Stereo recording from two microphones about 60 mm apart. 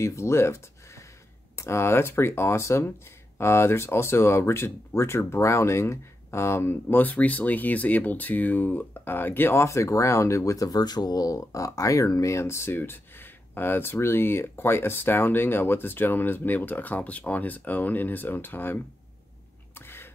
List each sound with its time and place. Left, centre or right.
0.0 s speech: left
12.7 s speech: left
19.7 s a sound: left